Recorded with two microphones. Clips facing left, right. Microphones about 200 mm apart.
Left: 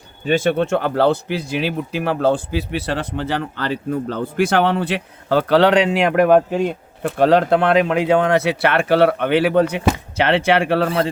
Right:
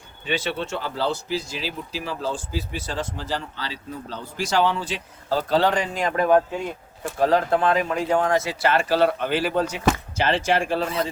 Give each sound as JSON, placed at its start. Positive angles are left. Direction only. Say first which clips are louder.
{"t": 0.3, "sound": "speech", "louder": "left 10 dB", "side_deg": 50}